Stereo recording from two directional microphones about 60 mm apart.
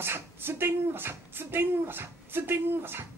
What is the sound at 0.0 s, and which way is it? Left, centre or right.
Speech, right.